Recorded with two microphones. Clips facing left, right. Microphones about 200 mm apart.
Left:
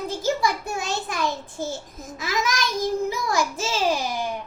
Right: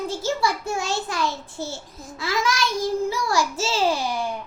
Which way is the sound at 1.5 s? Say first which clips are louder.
Left 2 dB; 50° left (ahead or behind).